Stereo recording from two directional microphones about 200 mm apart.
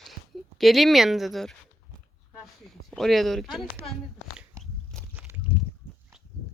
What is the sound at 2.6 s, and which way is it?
Speech, centre (ahead or behind).